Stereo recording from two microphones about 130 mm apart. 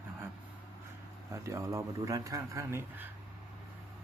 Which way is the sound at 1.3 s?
20° right (ahead or behind).